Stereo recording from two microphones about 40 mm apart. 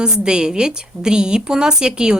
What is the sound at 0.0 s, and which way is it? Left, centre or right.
A woman's voice, right.